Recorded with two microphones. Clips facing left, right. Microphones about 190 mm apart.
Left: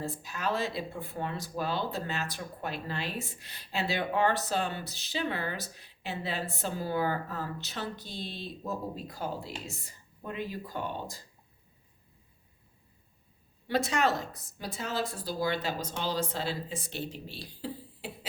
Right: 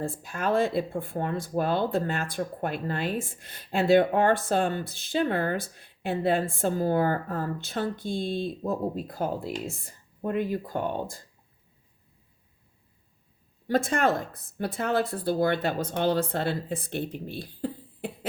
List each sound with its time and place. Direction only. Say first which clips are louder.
0.0 s speech: right 4 dB; 55° right (ahead or behind)
13.7 s speech: right 4 dB; 50° right (ahead or behind)